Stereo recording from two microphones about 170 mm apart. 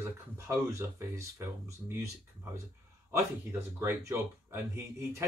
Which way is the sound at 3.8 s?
15° right (ahead or behind).